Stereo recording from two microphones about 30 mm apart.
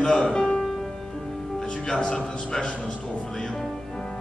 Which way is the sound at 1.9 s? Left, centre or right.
Left.